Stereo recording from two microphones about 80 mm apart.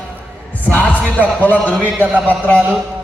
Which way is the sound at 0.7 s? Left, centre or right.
Centre.